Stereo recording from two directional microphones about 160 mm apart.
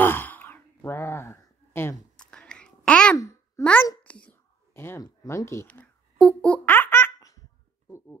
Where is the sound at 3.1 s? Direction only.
20° left (ahead or behind).